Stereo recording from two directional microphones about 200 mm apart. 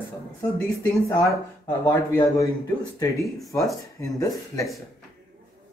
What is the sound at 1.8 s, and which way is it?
Speech, 15° left (ahead or behind).